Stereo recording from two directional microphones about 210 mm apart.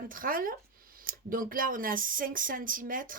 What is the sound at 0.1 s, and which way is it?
Speech, 40° right (ahead or behind).